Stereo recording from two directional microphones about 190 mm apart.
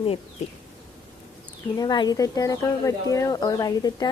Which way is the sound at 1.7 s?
20° left (ahead or behind).